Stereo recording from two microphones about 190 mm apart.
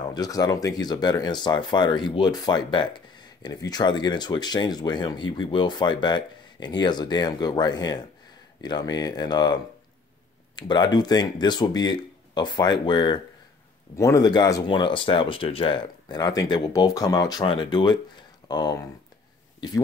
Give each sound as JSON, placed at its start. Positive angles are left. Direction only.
{"t": 0.0, "sound": "speech", "side_deg": 20}